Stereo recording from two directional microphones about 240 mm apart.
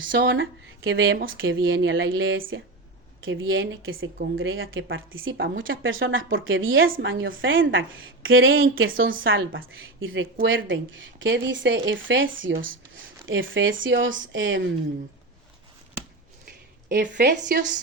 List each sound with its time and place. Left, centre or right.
0.0 s speech: right
16.5 s speech: right